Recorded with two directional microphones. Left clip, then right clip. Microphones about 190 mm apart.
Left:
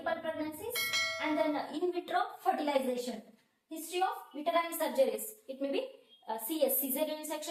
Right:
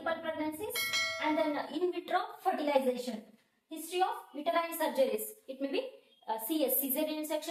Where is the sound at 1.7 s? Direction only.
25° right (ahead or behind).